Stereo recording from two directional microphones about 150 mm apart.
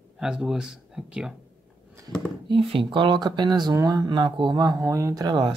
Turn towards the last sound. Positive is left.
turn(degrees=-25)  # may be behind; listen again after turning